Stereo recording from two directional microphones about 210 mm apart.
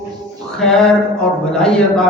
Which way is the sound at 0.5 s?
5° left (ahead or behind).